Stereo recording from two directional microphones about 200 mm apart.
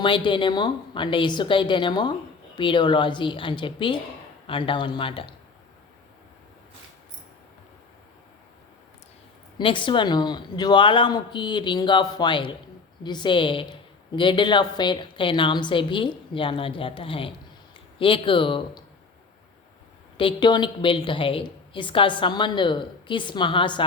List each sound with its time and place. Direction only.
0.0 s a woman's voice: 25° left (ahead or behind)
9.6 s a woman's voice: 25° left (ahead or behind)
20.1 s a woman's voice: 25° left (ahead or behind)